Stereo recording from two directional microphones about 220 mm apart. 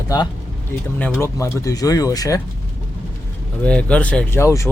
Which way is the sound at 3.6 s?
5° left (ahead or behind).